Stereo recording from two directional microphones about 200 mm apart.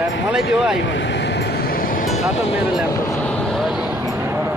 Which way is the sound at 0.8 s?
65° left (ahead or behind).